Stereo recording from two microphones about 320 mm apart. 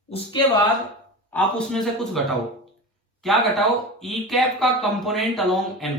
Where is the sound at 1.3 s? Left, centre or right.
Centre.